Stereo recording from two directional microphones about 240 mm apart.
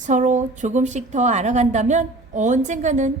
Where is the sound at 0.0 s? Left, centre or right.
Right.